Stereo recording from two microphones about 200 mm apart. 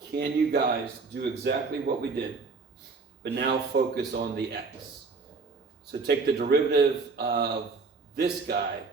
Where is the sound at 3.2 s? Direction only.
50° right (ahead or behind).